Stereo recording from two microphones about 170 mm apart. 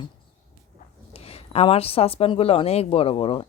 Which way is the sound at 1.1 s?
35° left (ahead or behind).